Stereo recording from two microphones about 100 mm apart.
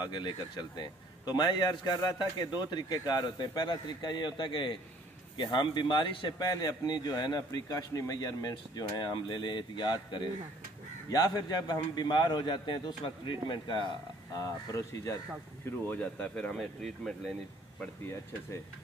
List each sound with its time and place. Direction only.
0.0 s speech: 50° left (ahead or behind)
14.3 s speech: 35° left (ahead or behind)
15.6 s speech: 15° left (ahead or behind)
16.5 s speech: centre (ahead or behind)